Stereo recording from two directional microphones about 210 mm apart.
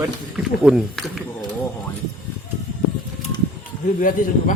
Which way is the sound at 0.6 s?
Centre (ahead or behind).